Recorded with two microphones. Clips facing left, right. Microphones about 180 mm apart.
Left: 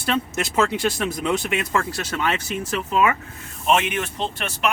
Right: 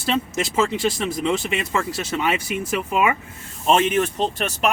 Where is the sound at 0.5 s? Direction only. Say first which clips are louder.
Even; centre (ahead or behind).